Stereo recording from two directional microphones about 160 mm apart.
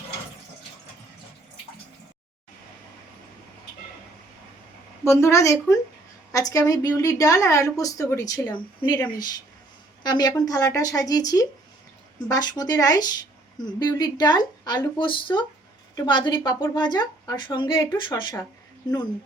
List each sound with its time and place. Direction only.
5.0 s a woman's voice: 20° left (ahead or behind)
10.0 s a woman's voice: 25° left (ahead or behind)